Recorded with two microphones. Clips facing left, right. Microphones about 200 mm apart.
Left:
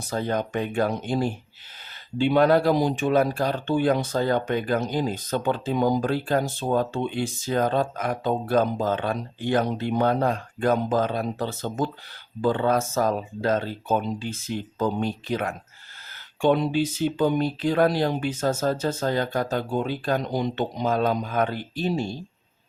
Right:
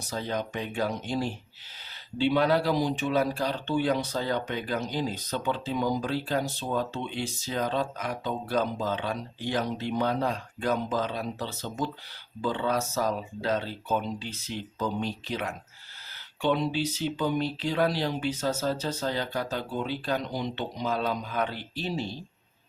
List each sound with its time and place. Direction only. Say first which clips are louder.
0.1 s speech: left 6 dB; 50° left (ahead or behind)